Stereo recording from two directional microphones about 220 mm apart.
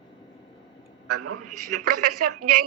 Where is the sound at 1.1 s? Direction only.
90° right.